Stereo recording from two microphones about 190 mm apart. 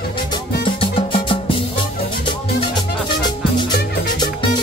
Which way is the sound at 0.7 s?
30° left (ahead or behind).